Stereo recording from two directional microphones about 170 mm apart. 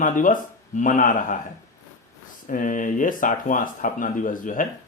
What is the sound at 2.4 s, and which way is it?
A man's voice, 50° left (ahead or behind).